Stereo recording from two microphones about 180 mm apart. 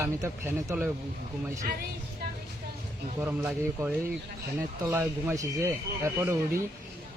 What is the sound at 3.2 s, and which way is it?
A man's voice, 10° right (ahead or behind).